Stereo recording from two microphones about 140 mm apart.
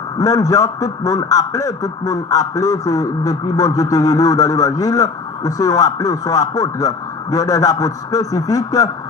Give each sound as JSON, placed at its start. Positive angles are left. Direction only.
{"t": 0.2, "sound": "a man's voice", "side_deg": 25}